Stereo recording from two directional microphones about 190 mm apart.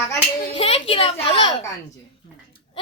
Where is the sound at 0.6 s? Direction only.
30° left (ahead or behind).